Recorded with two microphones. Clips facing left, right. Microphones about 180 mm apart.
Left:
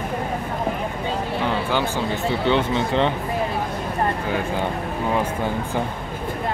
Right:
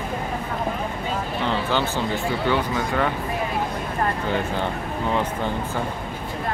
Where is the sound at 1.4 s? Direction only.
10° left (ahead or behind).